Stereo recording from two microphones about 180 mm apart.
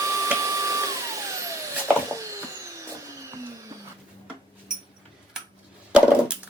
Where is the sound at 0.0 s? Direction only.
20° right (ahead or behind).